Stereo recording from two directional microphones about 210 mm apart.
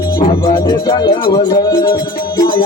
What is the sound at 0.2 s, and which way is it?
Music, 20° left (ahead or behind).